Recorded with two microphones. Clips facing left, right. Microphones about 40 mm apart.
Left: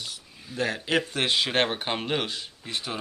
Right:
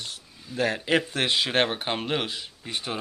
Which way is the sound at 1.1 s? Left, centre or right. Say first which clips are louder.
Right 1 dB; centre.